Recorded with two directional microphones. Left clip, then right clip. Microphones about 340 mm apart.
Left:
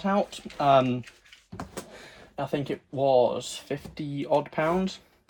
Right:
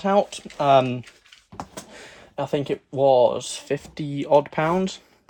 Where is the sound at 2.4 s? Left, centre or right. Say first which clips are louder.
Right 5 dB; right.